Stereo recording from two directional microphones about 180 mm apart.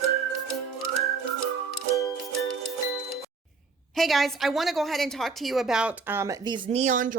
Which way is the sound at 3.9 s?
Centre (ahead or behind).